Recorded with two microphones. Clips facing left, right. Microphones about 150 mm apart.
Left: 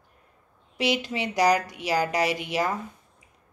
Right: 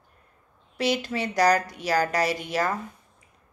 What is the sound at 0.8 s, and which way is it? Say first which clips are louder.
A woman's voice: right 1 dB; 15° left (ahead or behind).